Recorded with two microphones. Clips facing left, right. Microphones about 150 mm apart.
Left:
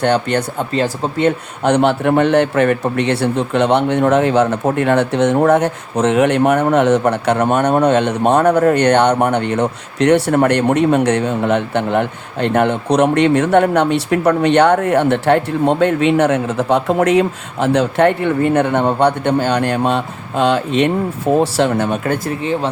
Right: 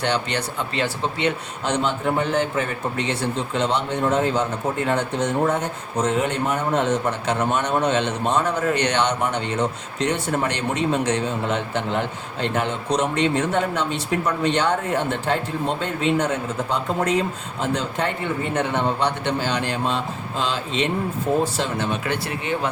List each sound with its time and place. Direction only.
0.0 s speech: 50° left (ahead or behind)
1.6 s a man's voice: 65° left (ahead or behind); by 22.4 s 45° left (ahead or behind)